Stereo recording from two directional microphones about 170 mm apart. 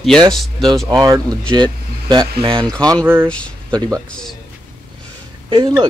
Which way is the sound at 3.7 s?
25° right (ahead or behind).